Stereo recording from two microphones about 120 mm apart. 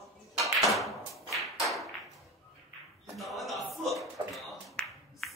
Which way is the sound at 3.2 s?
Centre (ahead or behind).